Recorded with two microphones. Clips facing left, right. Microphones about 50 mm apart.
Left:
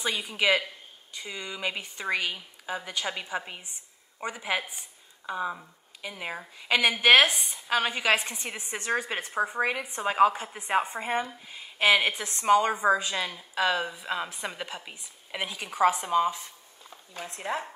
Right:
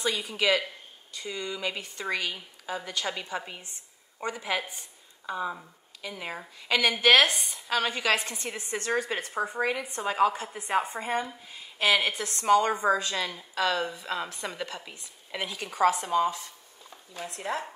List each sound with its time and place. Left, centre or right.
0.0 s a woman's voice: centre